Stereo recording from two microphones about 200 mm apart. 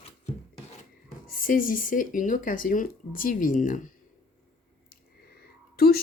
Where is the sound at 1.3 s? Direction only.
45° left (ahead or behind).